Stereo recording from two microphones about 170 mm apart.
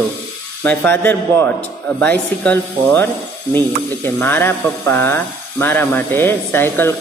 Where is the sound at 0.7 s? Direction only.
10° left (ahead or behind).